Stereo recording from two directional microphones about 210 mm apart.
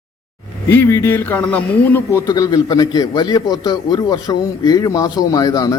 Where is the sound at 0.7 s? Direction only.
10° left (ahead or behind).